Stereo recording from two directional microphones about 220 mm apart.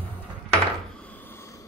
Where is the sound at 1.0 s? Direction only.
10° left (ahead or behind).